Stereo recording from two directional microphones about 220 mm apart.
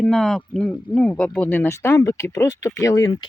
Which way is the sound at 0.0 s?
Centre (ahead or behind).